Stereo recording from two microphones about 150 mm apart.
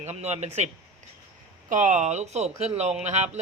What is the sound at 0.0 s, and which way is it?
Speech, 45° right (ahead or behind).